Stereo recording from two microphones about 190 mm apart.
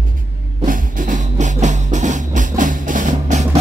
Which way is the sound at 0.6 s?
45° right (ahead or behind).